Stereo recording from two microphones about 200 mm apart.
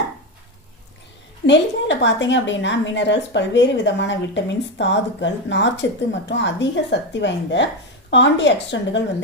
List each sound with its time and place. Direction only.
1.5 s a woman's voice: 60° left (ahead or behind)